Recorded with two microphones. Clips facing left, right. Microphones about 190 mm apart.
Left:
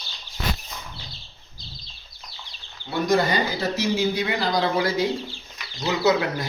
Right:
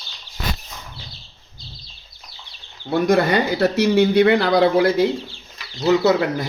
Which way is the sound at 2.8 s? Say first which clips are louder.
Right 5 dB; 60° right (ahead or behind).